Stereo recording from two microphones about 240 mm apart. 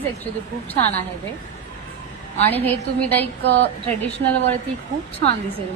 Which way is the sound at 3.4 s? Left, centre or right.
Right.